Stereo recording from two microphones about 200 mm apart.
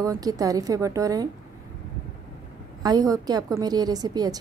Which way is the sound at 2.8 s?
20° right (ahead or behind).